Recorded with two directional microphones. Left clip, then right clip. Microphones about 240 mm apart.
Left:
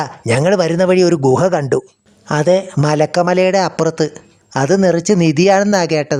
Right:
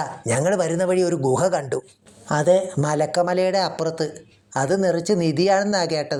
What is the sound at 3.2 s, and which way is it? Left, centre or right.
Speech, left.